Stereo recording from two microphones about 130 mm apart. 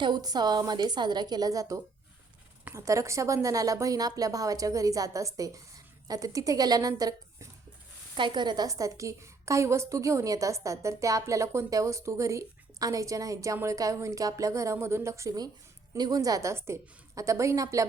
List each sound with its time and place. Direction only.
0.0 s a woman's voice: 30° right (ahead or behind)